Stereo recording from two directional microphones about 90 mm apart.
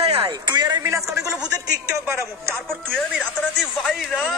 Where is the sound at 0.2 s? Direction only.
55° right (ahead or behind).